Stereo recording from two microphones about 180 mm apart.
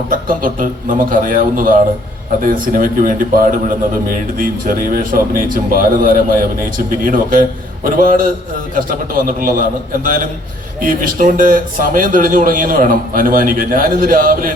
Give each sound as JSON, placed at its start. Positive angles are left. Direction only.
{"t": 0.3, "sound": "a man's voice", "side_deg": -50}